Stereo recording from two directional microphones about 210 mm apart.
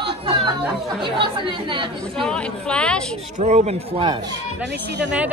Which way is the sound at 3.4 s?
35° right (ahead or behind).